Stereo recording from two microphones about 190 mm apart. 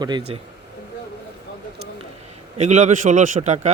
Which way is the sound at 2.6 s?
40° right (ahead or behind).